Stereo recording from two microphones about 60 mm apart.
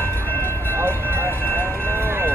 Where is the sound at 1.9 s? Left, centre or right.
Right.